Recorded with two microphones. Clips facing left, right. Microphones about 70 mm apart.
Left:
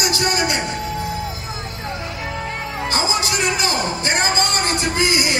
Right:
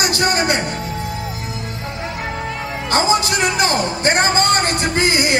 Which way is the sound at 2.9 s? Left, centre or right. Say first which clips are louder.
Right 6 dB; right.